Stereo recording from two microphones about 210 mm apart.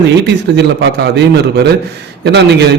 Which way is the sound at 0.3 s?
55° right (ahead or behind).